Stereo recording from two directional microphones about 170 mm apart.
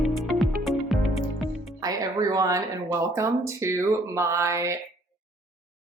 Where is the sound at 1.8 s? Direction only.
20° right (ahead or behind).